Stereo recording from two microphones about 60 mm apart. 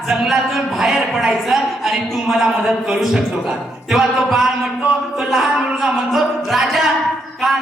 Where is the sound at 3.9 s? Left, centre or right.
Centre.